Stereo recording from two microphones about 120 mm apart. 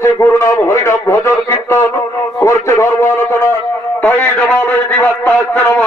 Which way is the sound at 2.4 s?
25° left (ahead or behind).